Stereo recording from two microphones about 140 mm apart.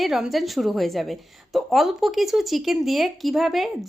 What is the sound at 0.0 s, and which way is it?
A woman's voice, centre (ahead or behind).